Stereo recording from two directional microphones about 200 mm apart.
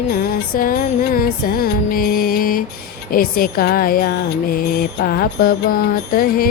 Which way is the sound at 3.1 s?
45° left (ahead or behind).